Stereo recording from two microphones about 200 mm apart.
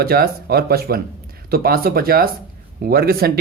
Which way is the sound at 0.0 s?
50° right (ahead or behind).